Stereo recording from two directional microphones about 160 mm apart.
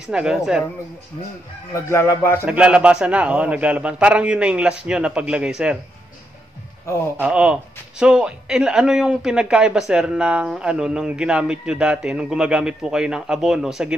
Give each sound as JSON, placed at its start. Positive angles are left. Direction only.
{"t": 0.0, "sound": "speech", "side_deg": -5}
{"t": 1.7, "sound": "music", "side_deg": 15}
{"t": 2.4, "sound": "a man's voice", "side_deg": -10}
{"t": 7.2, "sound": "speech", "side_deg": -5}